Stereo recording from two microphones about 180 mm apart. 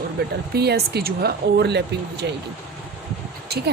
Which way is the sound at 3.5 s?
60° right (ahead or behind).